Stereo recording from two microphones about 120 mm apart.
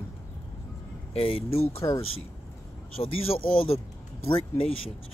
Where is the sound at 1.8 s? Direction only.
30° left (ahead or behind).